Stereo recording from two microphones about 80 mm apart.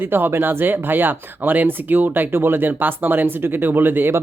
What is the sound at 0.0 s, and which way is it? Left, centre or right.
Speech, right.